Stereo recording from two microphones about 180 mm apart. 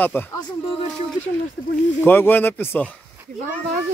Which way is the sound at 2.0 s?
10° left (ahead or behind).